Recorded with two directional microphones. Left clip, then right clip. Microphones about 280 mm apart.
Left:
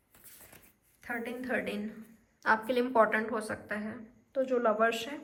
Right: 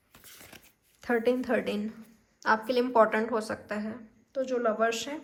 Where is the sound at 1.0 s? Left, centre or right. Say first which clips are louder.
Right 10 dB; centre.